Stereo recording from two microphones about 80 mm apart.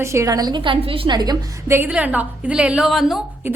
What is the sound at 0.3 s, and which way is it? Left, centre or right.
Speech, right.